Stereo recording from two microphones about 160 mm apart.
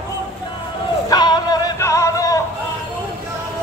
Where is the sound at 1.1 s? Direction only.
25° left (ahead or behind).